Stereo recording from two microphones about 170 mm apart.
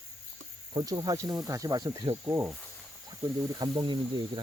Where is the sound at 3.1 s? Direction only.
25° right (ahead or behind).